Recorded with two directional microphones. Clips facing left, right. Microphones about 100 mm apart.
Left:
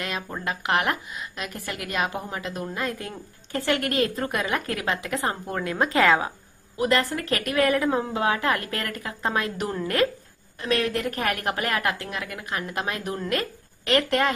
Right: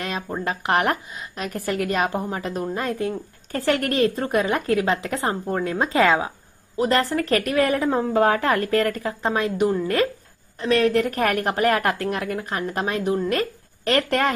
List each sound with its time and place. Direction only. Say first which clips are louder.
0.0 s speech: right 3 dB; 35° right (ahead or behind)
6.8 s speech: right 3 dB; 35° right (ahead or behind)
8.1 s speech: right 5 dB; 45° right (ahead or behind); by 9.9 s 15° right (ahead or behind)
10.6 s speech: right 6 dB; 35° right (ahead or behind)
13.3 s a woman's voice: right 4 dB; 35° right (ahead or behind)